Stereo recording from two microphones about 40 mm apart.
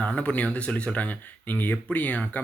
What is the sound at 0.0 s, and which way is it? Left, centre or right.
Speech, left.